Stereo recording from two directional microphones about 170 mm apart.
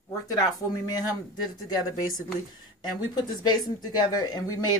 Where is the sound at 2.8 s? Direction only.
25° left (ahead or behind).